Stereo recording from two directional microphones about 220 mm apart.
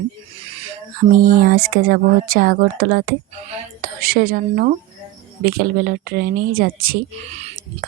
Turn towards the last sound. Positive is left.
turn(degrees=-35)  # may be behind; listen again after turning